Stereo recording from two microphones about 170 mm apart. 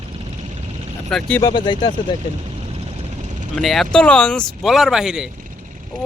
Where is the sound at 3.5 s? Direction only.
Centre (ahead or behind).